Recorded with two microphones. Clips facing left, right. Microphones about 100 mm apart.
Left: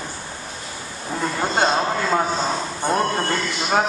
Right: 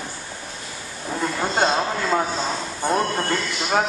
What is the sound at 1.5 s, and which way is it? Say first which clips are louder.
Speech: left 2 dB; 15° left (ahead or behind).